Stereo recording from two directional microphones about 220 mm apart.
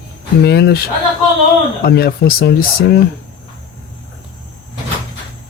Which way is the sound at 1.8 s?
45° left (ahead or behind).